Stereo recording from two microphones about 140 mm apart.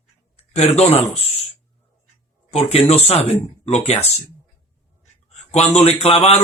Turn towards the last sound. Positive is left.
turn(degrees=50)  # may be behind; listen again after turning